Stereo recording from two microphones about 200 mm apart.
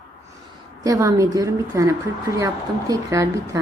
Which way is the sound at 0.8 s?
15° right (ahead or behind).